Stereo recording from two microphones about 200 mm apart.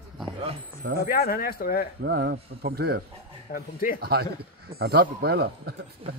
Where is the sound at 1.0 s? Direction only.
45° left (ahead or behind).